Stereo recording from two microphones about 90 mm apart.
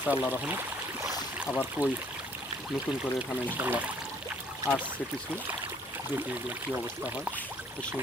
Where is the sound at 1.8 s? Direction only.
20° right (ahead or behind).